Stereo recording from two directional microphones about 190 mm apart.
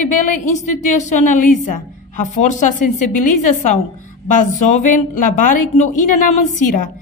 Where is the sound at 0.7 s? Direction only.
40° left (ahead or behind).